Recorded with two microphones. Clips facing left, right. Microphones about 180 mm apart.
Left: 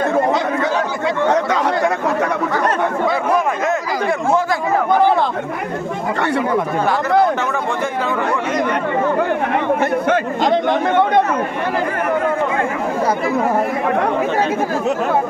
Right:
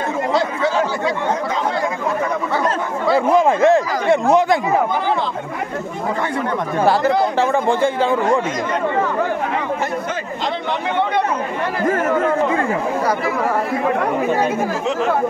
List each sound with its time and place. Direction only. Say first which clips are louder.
1.2 s chatter: left 4 dB; 70° left (ahead or behind)
3.3 s a sound: right 5 dB; 30° right (ahead or behind)
7.3 s speech: right 4 dB; 30° right (ahead or behind)
10.0 s speech: left 7 dB; 50° left (ahead or behind)